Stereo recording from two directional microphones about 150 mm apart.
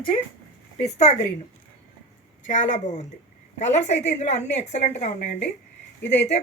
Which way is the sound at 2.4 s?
55° left (ahead or behind).